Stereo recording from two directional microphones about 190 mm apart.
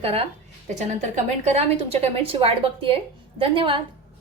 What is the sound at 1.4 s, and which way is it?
A woman's voice, 35° right (ahead or behind).